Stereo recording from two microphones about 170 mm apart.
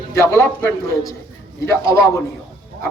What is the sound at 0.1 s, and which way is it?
A man's voice, 15° left (ahead or behind).